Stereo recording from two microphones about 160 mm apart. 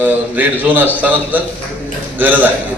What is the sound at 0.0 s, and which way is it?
A man's voice, 10° right (ahead or behind).